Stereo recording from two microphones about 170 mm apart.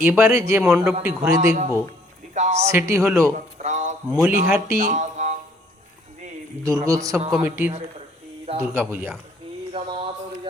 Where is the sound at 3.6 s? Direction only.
45° right (ahead or behind).